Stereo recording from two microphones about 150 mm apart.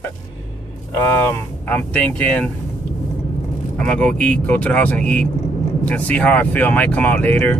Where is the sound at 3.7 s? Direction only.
5° left (ahead or behind).